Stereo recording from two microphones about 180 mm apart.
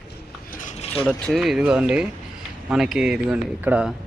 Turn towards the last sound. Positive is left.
turn(degrees=-5)  # may be behind; listen again after turning